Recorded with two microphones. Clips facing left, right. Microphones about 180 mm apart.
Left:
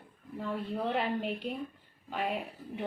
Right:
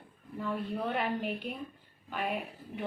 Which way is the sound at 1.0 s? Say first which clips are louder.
Left 1 dB; 25° left (ahead or behind).